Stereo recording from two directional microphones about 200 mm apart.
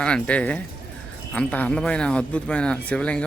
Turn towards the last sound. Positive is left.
turn(degrees=5)  # may be behind; listen again after turning